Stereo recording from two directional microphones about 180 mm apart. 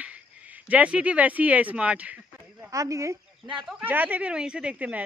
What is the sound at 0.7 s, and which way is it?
Speech, 5° right (ahead or behind).